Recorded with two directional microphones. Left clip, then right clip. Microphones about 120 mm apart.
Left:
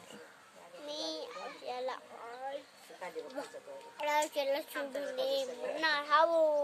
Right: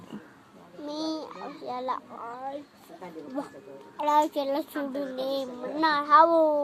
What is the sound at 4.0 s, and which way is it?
A child's voice, 20° left (ahead or behind).